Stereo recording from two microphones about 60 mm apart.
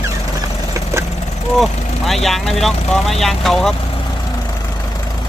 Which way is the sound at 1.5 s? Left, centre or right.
Centre.